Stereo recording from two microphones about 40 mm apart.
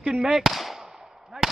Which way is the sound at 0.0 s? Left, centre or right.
Centre.